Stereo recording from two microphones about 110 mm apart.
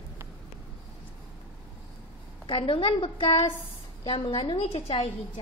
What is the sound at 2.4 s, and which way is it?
A woman's voice, 50° left (ahead or behind).